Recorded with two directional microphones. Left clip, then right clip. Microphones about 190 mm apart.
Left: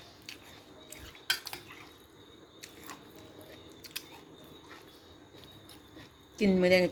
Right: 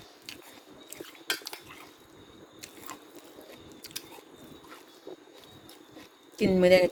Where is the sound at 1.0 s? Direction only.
15° right (ahead or behind).